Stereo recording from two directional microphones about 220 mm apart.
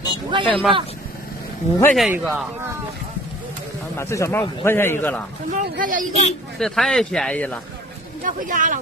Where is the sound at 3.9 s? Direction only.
10° left (ahead or behind).